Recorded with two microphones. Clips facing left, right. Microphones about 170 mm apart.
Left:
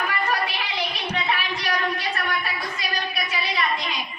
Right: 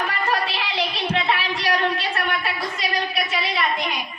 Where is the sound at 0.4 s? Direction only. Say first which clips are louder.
Right 3 dB; 75° right (ahead or behind).